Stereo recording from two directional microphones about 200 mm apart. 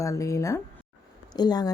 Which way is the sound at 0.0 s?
15° left (ahead or behind).